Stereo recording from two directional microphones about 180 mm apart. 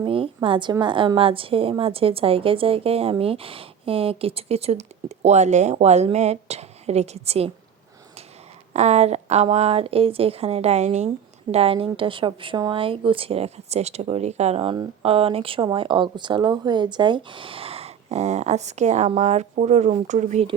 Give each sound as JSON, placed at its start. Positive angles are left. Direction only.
{"t": 0.0, "sound": "a woman's voice", "side_deg": -30}
{"t": 8.7, "sound": "a woman's voice", "side_deg": -40}